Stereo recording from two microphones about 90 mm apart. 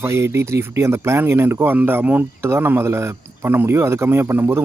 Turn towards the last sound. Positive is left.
turn(degrees=-25)  # may be behind; listen again after turning